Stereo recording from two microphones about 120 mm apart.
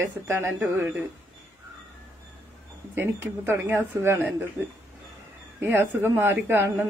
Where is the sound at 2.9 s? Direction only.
20° right (ahead or behind).